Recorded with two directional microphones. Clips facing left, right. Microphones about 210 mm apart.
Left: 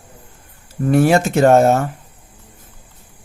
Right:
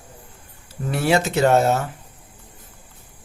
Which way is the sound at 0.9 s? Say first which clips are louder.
Left 6 dB; 50° left (ahead or behind).